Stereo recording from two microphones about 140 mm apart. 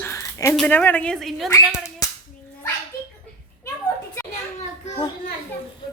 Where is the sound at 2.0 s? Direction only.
25° left (ahead or behind).